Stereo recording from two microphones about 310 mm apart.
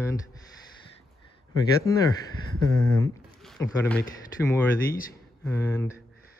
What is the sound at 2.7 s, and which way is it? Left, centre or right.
Speech, centre.